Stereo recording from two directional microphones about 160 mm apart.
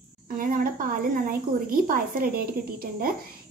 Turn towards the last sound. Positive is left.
turn(degrees=-65)  # may be behind; listen again after turning